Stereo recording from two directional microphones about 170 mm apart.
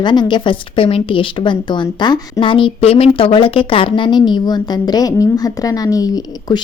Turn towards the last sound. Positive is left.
turn(degrees=20)  # may be behind; listen again after turning